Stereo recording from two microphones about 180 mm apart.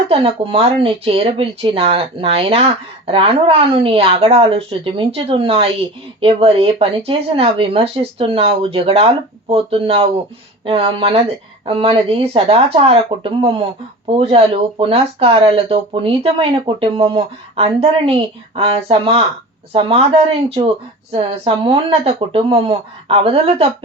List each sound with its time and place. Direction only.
0.1 s speech: 30° right (ahead or behind)